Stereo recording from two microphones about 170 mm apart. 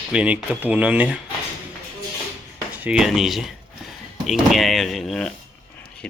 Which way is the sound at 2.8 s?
5° right (ahead or behind).